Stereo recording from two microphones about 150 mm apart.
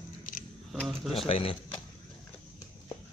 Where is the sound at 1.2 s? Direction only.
40° left (ahead or behind).